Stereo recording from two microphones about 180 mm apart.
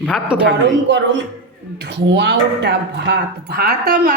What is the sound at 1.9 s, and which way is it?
Speech, 75° right (ahead or behind).